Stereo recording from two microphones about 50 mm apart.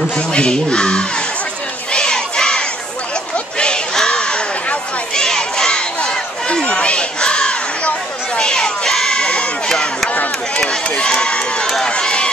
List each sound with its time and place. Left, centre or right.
0.1 s speech: centre
1.9 s crowd: centre
3.3 s a sound: centre
5.1 s crowd: centre
10.0 s crowd: left
10.5 s run: left
11.9 s run: centre